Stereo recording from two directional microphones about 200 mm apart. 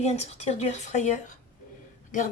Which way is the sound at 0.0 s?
30° left (ahead or behind).